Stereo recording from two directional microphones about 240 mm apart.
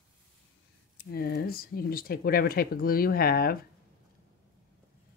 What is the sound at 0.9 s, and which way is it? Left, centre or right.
Speech, left.